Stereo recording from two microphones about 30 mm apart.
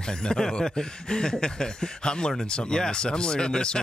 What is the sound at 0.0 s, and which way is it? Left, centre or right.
Speech, left.